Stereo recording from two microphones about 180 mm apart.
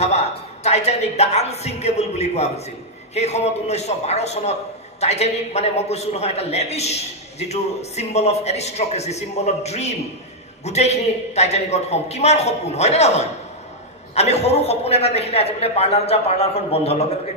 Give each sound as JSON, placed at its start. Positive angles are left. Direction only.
{"t": 0.0, "sound": "a woman's voice", "side_deg": 35}